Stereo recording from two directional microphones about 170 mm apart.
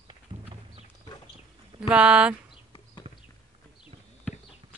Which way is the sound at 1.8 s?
5° right (ahead or behind).